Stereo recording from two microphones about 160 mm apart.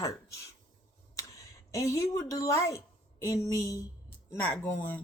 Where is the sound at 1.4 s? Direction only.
20° left (ahead or behind).